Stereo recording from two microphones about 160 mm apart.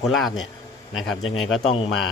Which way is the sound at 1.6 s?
35° left (ahead or behind).